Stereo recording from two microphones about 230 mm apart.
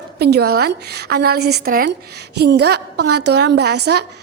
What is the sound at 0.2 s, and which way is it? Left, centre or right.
A woman's voice, right.